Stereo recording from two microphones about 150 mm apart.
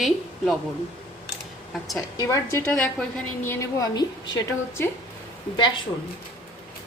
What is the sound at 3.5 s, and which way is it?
Speech, 25° left (ahead or behind).